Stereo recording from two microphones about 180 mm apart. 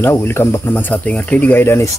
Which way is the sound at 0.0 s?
10° left (ahead or behind).